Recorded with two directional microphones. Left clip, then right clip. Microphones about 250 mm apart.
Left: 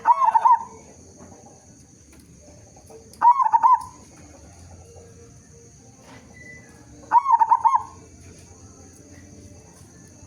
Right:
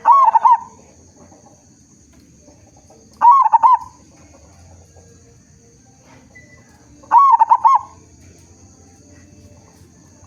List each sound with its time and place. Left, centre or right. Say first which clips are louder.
0.0 s goose: right 7 dB; centre
3.2 s goose: right 6 dB; centre
7.1 s goose: right 7 dB; centre